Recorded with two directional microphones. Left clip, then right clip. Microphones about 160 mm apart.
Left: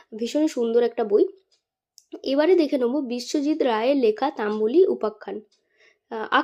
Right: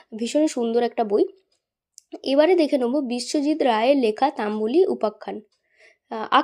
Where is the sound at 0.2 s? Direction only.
25° right (ahead or behind).